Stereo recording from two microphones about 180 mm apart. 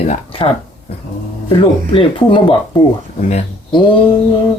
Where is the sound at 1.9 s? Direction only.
25° left (ahead or behind).